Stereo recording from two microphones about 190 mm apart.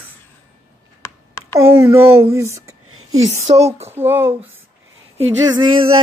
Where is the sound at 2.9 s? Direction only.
90° right.